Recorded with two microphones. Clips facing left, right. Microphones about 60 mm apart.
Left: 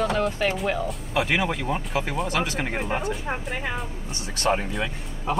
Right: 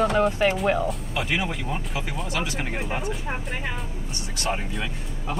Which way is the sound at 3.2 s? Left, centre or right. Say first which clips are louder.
Left 1 dB; centre.